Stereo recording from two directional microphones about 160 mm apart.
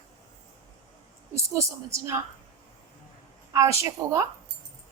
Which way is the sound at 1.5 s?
20° right (ahead or behind).